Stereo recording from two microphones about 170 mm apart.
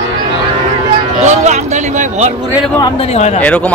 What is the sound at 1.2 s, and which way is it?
A man's voice, 45° right (ahead or behind).